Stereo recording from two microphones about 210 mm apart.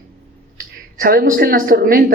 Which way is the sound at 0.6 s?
45° right (ahead or behind).